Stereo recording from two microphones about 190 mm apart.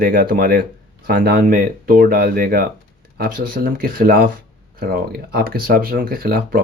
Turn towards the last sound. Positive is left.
turn(degrees=-50)  # may be behind; listen again after turning